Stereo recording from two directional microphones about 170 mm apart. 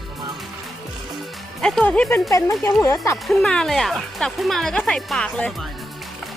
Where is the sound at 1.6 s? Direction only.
5° left (ahead or behind).